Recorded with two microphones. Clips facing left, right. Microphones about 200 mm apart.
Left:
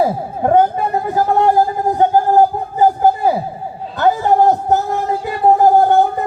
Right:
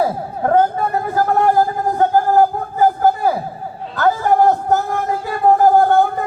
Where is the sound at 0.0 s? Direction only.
20° left (ahead or behind).